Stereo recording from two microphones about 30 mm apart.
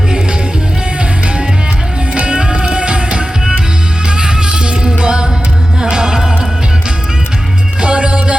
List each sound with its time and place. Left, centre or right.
2.1 s music: right
7.8 s music: right